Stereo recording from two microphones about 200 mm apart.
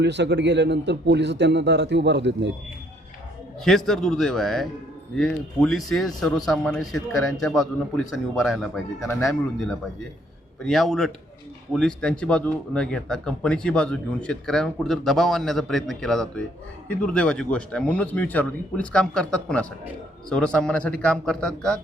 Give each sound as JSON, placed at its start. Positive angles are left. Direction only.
{"t": 0.0, "sound": "a man's voice", "side_deg": -60}
{"t": 3.6, "sound": "speech", "side_deg": 0}